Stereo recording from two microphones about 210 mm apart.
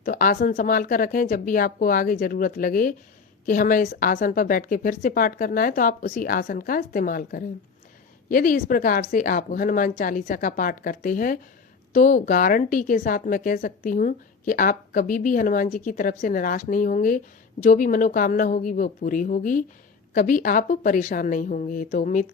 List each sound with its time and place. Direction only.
0.0 s a woman's voice: 40° left (ahead or behind)